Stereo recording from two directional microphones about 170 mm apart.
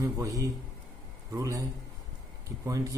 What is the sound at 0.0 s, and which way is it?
A man's voice, 20° right (ahead or behind).